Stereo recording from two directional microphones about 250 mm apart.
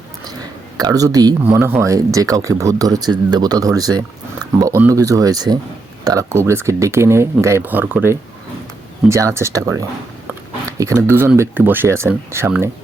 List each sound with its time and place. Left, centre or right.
0.8 s speech: centre